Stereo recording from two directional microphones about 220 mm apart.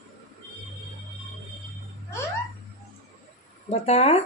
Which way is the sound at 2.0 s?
15° left (ahead or behind).